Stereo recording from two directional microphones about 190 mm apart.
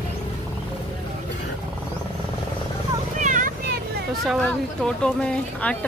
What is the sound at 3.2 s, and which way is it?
Vehicle, 45° right (ahead or behind).